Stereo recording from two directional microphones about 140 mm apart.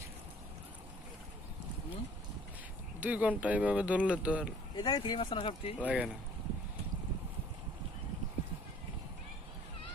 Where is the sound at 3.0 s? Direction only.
10° right (ahead or behind).